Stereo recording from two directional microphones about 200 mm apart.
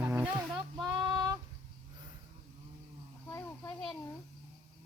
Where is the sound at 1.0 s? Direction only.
20° right (ahead or behind).